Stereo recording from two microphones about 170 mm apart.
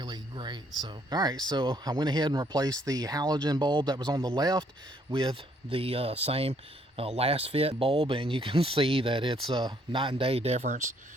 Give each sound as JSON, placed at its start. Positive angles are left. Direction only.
{"t": 0.0, "sound": "speech", "side_deg": -25}